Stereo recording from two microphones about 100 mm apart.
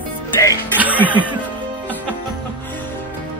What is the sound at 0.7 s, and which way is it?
Music, 15° right (ahead or behind).